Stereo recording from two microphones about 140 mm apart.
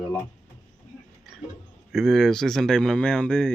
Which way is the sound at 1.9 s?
Centre (ahead or behind).